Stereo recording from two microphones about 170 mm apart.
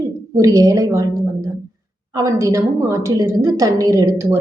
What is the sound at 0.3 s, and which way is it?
A woman's voice, 20° right (ahead or behind).